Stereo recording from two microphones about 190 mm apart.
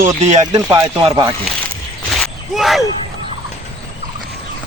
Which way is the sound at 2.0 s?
Centre (ahead or behind).